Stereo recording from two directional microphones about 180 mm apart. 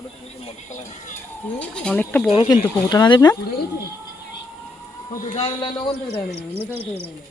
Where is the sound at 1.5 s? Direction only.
5° left (ahead or behind).